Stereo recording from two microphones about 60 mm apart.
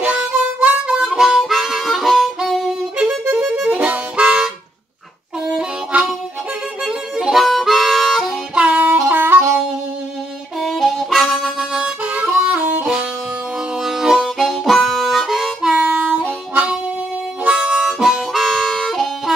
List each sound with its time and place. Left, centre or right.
0.0 s harmonica: right
3.3 s music: centre
3.6 s harmonica: right
5.5 s harmonica: centre
8.5 s music: centre
9.0 s music: right
10.6 s harmonica: centre
11.3 s harmonica: centre
12.0 s harmonica: right
13.7 s harmonica: centre
15.7 s harmonica: right; by 19.3 s centre